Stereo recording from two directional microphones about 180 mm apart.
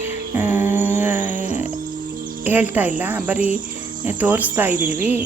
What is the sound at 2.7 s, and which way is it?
Speech, 10° right (ahead or behind).